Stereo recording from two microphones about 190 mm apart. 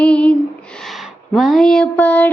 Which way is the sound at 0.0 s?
5° left (ahead or behind).